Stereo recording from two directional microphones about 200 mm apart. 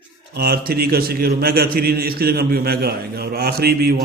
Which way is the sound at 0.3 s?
50° right (ahead or behind).